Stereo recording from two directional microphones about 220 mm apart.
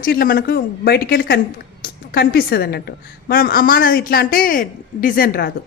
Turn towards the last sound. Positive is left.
turn(degrees=45)  # may be behind; listen again after turning